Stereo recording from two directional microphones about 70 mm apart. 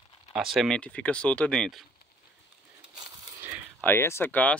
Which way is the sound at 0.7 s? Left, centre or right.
Centre.